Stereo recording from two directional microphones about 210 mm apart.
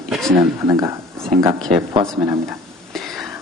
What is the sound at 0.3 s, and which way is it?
Speech, 15° right (ahead or behind).